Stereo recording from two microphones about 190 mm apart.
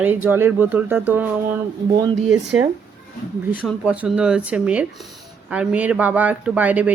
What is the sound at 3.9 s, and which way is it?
Speech, 5° right (ahead or behind).